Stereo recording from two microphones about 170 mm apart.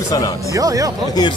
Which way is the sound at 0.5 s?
20° right (ahead or behind).